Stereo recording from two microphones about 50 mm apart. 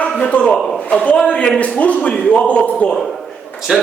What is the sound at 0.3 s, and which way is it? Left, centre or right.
A man's voice, left.